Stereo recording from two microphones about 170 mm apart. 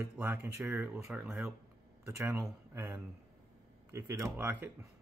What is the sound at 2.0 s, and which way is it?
Speech, 15° right (ahead or behind).